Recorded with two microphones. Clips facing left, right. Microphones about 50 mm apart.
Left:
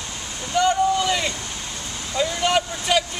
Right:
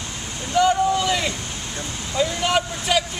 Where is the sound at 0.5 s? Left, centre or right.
Centre.